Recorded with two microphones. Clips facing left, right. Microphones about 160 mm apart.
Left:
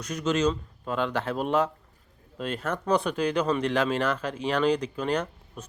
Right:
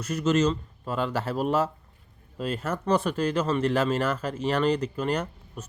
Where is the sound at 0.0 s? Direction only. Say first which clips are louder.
Right 2 dB; 5° right (ahead or behind).